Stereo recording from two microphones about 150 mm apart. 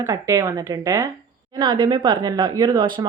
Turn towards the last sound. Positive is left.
turn(degrees=-30)  # may be behind; listen again after turning